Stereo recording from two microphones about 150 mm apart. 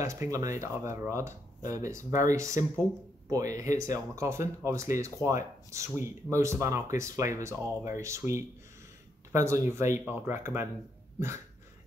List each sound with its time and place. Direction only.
0.0 s speech: 20° right (ahead or behind)